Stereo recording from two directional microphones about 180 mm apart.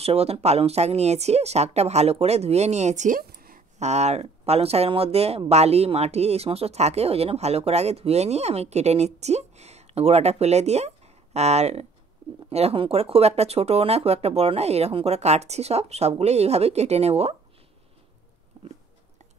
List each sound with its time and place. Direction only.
0.0 s speech: 35° right (ahead or behind); by 3.6 s 55° right (ahead or behind)
3.8 s speech: 40° right (ahead or behind)
18.6 s a sound: 30° right (ahead or behind)